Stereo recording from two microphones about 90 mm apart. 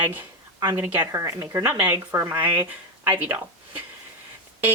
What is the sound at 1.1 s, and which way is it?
Speech, 35° right (ahead or behind).